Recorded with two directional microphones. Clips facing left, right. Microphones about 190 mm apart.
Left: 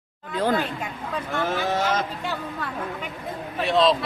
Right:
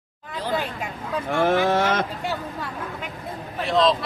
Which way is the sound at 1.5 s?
60° right (ahead or behind).